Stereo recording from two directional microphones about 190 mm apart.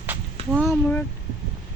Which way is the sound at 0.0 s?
10° right (ahead or behind).